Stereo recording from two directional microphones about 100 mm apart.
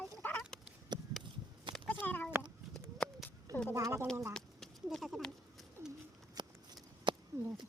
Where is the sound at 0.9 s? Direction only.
45° right (ahead or behind).